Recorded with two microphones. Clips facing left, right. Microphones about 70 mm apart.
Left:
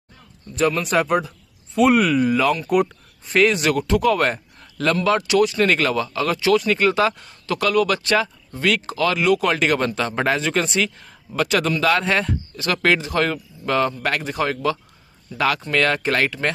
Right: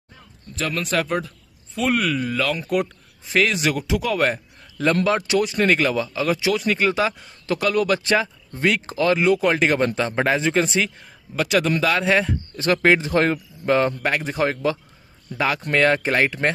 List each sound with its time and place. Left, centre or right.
0.6 s speech: centre
5.0 s speech: right
5.6 s speech: centre
7.2 s speech: right
12.7 s speech: right